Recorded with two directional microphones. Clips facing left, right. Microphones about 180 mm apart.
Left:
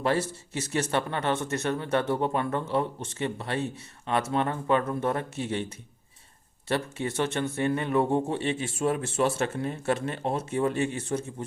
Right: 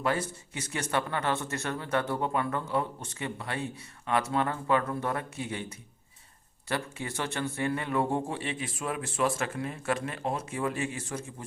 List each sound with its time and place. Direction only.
0.0 s a man's voice: 30° left (ahead or behind)